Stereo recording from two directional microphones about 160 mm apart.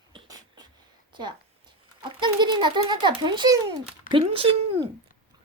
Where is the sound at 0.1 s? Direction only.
25° right (ahead or behind).